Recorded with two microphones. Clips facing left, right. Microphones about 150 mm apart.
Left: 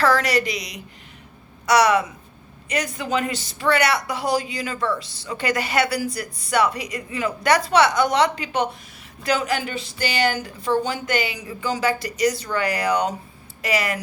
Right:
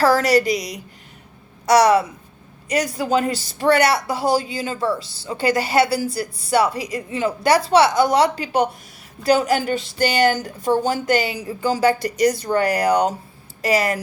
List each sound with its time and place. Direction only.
0.0 s a woman's voice: 35° right (ahead or behind)